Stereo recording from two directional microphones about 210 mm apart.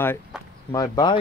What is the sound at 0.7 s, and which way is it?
Speech, 15° left (ahead or behind).